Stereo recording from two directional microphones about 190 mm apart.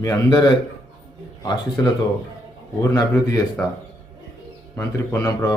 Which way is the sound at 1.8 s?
15° left (ahead or behind).